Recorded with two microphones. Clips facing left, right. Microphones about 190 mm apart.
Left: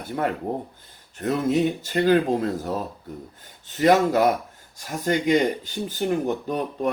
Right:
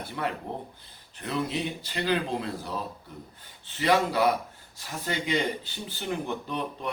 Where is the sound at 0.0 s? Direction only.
45° left (ahead or behind).